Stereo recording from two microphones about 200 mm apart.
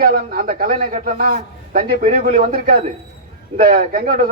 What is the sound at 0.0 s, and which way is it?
A man's voice, 45° right (ahead or behind).